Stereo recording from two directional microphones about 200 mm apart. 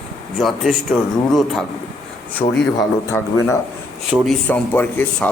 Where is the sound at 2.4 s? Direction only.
25° left (ahead or behind).